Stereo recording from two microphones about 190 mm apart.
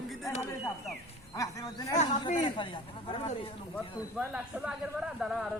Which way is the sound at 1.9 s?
40° left (ahead or behind).